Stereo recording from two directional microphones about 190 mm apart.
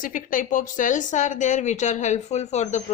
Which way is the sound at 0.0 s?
45° left (ahead or behind).